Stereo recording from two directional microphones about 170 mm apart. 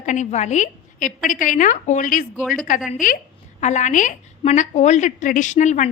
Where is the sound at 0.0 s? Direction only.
45° left (ahead or behind).